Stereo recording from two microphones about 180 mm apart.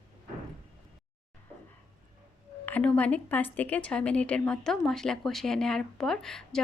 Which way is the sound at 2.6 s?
10° left (ahead or behind).